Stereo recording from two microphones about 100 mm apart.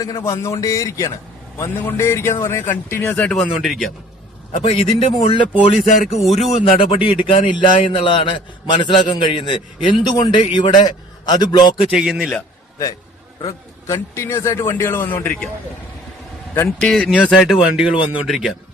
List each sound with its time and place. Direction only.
0.3 s a man's voice: 30° left (ahead or behind); by 3.3 s 15° left (ahead or behind)
3.6 s speech: centre (ahead or behind)
4.5 s speech: 70° left (ahead or behind)
5.6 s a sound: 90° left
6.6 s a man's voice: 65° left (ahead or behind); by 11.7 s 45° left (ahead or behind)
11.9 s speech: 5° right (ahead or behind)
13.4 s a man's voice: 30° left (ahead or behind)
16.8 s speech: 5° left (ahead or behind)